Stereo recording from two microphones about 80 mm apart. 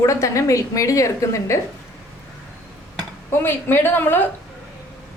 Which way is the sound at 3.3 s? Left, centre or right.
Left.